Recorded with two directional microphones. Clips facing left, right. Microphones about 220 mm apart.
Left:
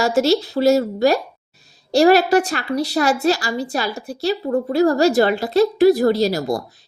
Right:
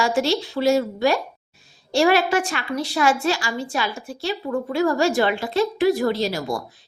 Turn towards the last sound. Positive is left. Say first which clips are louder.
# left 5 dB
turn(degrees=40)  # may be behind; listen again after turning